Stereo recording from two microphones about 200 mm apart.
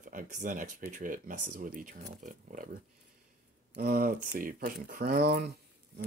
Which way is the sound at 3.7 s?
45° right (ahead or behind).